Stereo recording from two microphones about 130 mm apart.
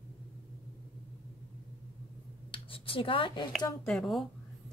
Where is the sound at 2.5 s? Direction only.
40° left (ahead or behind).